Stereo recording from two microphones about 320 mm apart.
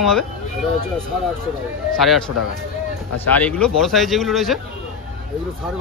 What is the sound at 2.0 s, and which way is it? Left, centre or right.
Speech, centre.